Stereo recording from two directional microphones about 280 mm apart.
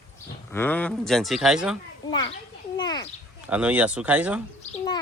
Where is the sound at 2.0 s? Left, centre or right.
Centre.